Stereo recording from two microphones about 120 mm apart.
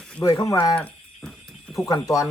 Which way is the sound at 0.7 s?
5° left (ahead or behind).